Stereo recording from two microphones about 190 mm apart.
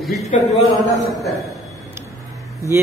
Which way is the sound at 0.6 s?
Centre (ahead or behind).